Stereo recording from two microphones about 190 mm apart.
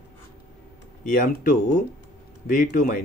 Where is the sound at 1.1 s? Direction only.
45° left (ahead or behind).